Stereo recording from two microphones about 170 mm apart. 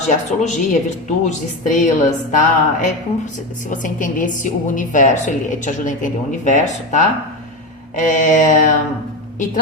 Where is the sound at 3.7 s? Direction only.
50° left (ahead or behind).